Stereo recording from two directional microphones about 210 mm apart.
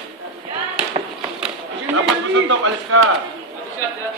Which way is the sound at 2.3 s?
70° right (ahead or behind).